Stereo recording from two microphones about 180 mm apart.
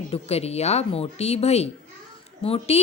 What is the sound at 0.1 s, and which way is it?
A woman's voice, 35° left (ahead or behind).